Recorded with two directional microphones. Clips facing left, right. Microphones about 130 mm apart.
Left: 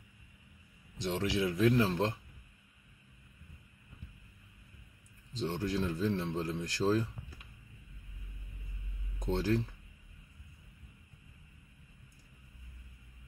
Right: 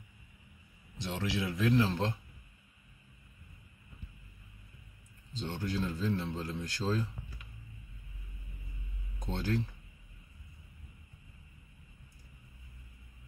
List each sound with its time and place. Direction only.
1.1 s speech: 35° left (ahead or behind)
5.4 s a man's voice: 30° left (ahead or behind)
9.3 s speech: 30° left (ahead or behind)